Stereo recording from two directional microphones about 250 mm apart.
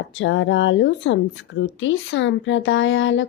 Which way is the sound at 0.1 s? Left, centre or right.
Left.